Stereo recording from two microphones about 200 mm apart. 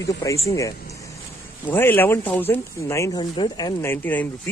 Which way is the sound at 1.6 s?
10° left (ahead or behind).